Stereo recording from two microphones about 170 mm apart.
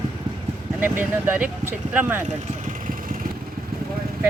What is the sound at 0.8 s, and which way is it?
Speech, 10° right (ahead or behind).